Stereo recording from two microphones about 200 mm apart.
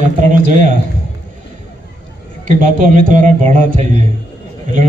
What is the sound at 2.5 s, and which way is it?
A man's voice, 40° right (ahead or behind).